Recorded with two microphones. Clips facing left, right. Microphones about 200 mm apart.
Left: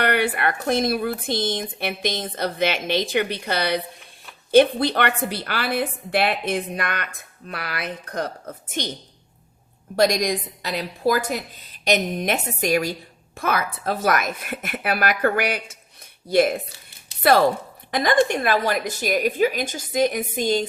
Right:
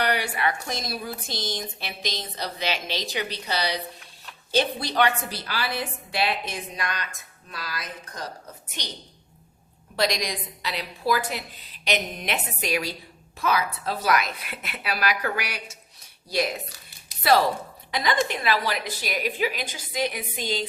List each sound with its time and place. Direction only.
0.0 s a woman's voice: 55° left (ahead or behind)
9.9 s a child's voice: 50° left (ahead or behind)